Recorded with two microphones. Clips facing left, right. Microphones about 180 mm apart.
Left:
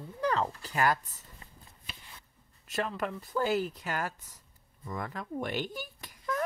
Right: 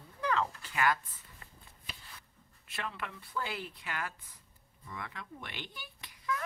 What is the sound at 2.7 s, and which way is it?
Speech, 40° left (ahead or behind).